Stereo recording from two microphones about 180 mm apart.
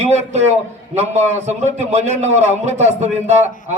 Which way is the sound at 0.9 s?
40° right (ahead or behind).